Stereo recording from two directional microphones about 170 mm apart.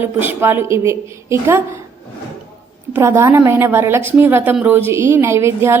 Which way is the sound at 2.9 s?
15° right (ahead or behind).